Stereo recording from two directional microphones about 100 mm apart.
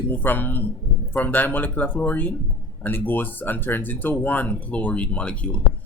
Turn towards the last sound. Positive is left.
turn(degrees=10)  # may be behind; listen again after turning